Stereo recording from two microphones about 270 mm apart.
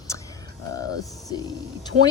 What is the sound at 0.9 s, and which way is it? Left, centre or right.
Music, centre.